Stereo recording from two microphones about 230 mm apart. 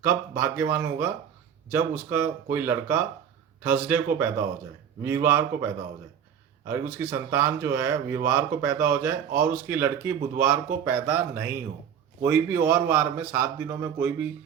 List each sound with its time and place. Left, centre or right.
0.0 s speech: centre